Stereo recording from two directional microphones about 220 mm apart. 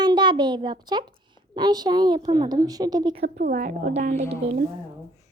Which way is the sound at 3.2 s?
45° right (ahead or behind).